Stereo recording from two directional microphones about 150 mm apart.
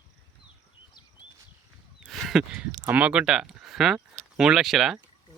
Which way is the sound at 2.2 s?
5° right (ahead or behind).